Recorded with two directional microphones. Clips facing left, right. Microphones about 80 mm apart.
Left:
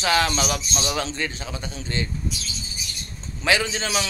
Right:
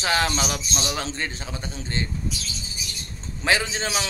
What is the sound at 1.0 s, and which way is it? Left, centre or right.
A man's voice, right.